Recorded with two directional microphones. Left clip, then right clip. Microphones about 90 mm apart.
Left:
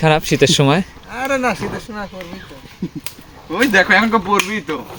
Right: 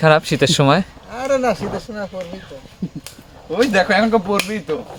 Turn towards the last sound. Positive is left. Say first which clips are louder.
# left 2 dB
turn(degrees=-40)  # may be behind; listen again after turning